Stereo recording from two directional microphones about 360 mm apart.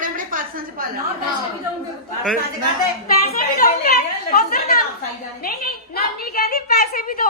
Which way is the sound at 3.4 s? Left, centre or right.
Left.